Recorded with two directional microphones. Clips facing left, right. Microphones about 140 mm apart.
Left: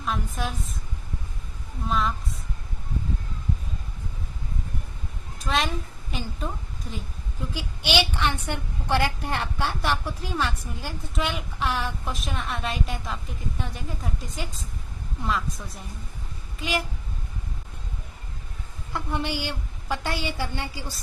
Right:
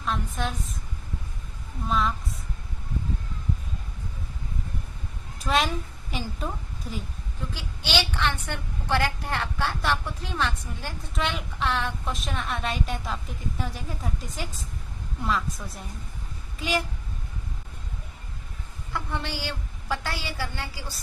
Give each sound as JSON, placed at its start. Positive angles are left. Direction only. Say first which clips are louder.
{"t": 0.0, "sound": "a woman's voice", "louder": "even", "side_deg": 5}
{"t": 1.9, "sound": "a woman's voice", "louder": "even", "side_deg": 0}
{"t": 5.5, "sound": "a woman's voice", "louder": "right 1 dB", "side_deg": 0}
{"t": 7.5, "sound": "a woman's voice", "louder": "left 3 dB", "side_deg": 15}
{"t": 18.9, "sound": "a woman's voice", "louder": "left 3 dB", "side_deg": 15}